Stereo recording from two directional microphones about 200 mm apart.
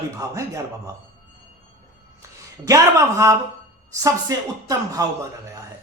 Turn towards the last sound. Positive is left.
turn(degrees=-15)  # may be behind; listen again after turning